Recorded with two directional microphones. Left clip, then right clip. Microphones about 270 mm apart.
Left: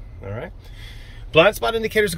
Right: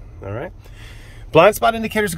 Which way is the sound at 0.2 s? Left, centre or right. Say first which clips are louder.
Right 4 dB; centre.